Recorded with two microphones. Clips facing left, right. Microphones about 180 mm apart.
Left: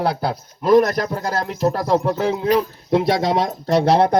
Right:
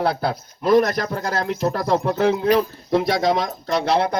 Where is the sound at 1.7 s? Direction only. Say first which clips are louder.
Left 3 dB; 5° left (ahead or behind).